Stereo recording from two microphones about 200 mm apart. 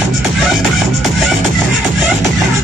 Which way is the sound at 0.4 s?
Centre (ahead or behind).